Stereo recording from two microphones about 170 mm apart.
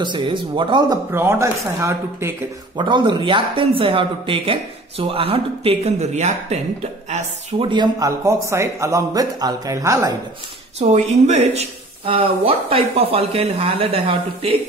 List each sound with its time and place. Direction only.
0.0 s a woman's voice: 30° right (ahead or behind)
1.1 s speech: 15° right (ahead or behind)
2.8 s a woman's voice: 30° right (ahead or behind)
10.8 s speech: 40° right (ahead or behind)